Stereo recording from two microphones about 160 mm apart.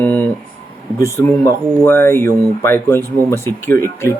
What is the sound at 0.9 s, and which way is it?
A man's voice, 15° left (ahead or behind).